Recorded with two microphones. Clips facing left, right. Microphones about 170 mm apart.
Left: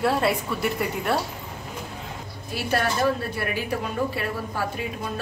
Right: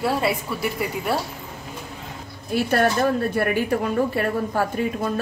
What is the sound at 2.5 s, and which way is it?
A woman's voice, 55° right (ahead or behind).